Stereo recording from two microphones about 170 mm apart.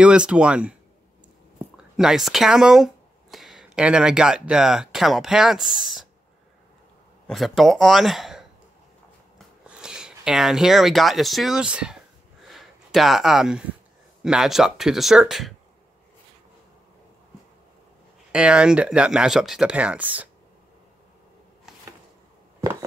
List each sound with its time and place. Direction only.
0.0 s speech: 5° right (ahead or behind)
2.0 s speech: 5° right (ahead or behind)
7.2 s speech: centre (ahead or behind)
9.7 s speech: 5° right (ahead or behind)
12.4 s a sound: centre (ahead or behind)
14.2 s speech: 5° right (ahead or behind)
18.3 s speech: 5° right (ahead or behind)
22.6 s a sound: 20° right (ahead or behind)